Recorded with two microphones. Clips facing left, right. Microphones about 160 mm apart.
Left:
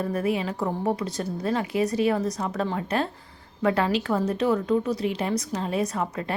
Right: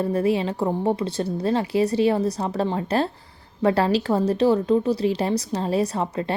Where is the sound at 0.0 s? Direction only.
30° right (ahead or behind).